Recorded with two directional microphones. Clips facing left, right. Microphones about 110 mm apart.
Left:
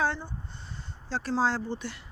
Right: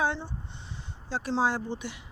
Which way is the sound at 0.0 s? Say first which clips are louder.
Even; 15° right (ahead or behind).